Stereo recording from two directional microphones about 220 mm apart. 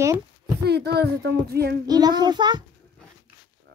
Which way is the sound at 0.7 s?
50° right (ahead or behind).